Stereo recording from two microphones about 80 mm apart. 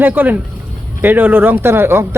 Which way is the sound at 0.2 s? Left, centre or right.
Right.